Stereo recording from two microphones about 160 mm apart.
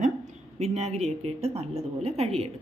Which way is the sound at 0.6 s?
40° right (ahead or behind).